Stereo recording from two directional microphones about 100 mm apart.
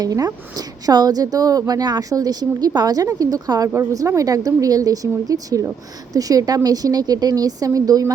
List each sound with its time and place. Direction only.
0.0 s a woman's voice: 40° right (ahead or behind)